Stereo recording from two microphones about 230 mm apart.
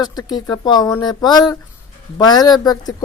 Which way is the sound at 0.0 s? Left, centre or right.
Centre.